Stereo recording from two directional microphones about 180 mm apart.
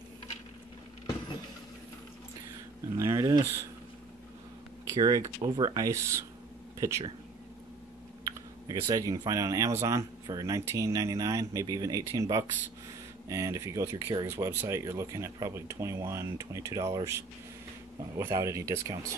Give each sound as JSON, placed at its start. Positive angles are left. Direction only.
{"t": 3.0, "sound": "speech", "side_deg": -20}
{"t": 4.8, "sound": "speech", "side_deg": -20}
{"t": 8.2, "sound": "speech", "side_deg": -20}